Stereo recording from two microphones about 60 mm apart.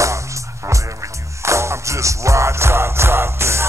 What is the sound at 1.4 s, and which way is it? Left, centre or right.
Music, right.